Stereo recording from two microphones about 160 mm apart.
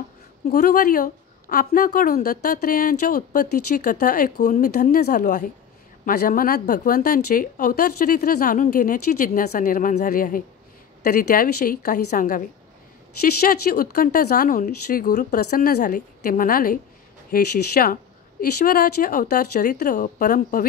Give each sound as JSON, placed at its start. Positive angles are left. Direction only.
{"t": 0.5, "sound": "a woman's voice", "side_deg": 65}
{"t": 19.7, "sound": "a woman's voice", "side_deg": 55}